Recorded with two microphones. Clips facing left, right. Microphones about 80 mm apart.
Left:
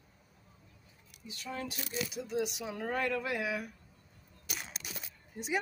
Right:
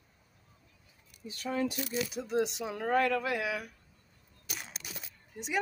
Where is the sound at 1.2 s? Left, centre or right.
Right.